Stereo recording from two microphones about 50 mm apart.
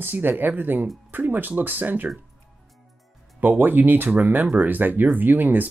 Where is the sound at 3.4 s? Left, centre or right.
Right.